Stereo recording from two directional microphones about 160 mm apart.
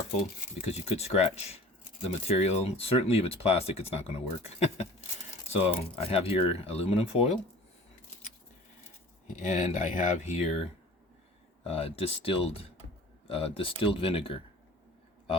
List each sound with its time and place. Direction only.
0.6 s speech: 40° left (ahead or behind)
9.4 s speech: 50° left (ahead or behind)
11.6 s speech: 40° left (ahead or behind)